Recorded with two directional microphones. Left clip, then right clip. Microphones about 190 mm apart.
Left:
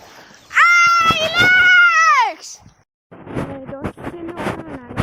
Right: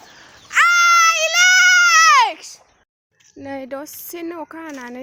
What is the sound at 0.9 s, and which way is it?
Baby cry, 15° right (ahead or behind).